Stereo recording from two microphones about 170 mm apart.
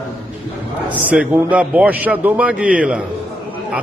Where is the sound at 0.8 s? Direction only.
10° right (ahead or behind).